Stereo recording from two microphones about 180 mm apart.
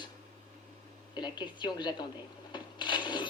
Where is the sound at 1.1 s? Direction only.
25° left (ahead or behind).